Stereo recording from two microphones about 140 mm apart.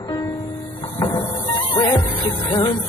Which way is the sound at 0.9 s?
30° left (ahead or behind).